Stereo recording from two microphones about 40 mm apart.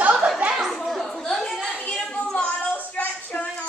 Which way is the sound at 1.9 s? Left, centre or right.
Left.